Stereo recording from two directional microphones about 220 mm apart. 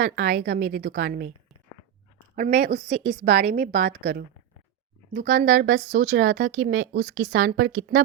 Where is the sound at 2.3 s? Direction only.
35° right (ahead or behind).